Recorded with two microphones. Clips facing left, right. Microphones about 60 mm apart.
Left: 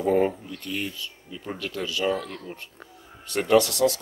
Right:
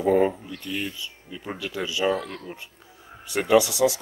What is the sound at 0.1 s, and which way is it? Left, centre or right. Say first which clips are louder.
Speech: right 2 dB; centre.